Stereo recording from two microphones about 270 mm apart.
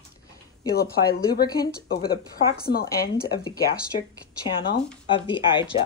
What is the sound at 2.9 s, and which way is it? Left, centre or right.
Speech, left.